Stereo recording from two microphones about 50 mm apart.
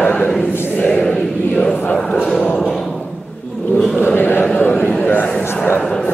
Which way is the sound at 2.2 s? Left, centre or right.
Centre.